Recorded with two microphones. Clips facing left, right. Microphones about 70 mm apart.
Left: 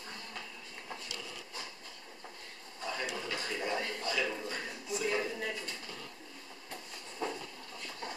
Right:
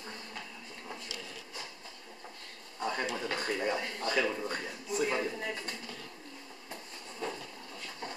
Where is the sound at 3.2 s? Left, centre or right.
Right.